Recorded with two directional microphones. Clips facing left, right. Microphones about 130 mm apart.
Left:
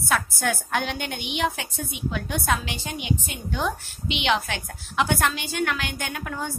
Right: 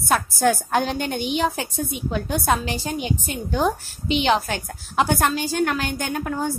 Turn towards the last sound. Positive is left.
turn(degrees=-40)  # may be behind; listen again after turning